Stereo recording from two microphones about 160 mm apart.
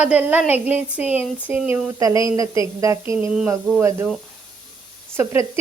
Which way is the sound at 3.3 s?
5° right (ahead or behind).